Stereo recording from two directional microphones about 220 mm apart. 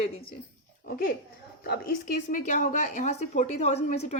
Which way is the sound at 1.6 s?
45° left (ahead or behind).